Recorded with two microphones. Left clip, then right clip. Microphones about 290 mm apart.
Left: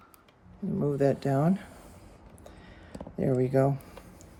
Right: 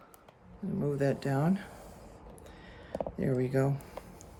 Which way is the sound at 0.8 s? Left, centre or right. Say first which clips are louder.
Left 5 dB; centre.